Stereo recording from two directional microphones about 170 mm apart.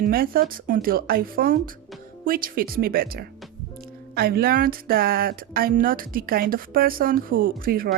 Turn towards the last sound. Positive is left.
turn(degrees=-60)  # may be behind; listen again after turning